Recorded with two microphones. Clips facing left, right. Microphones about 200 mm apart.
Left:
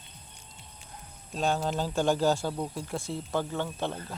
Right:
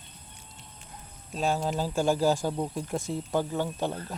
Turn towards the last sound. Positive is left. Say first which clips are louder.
# right 2 dB
turn(degrees=-15)  # may be behind; listen again after turning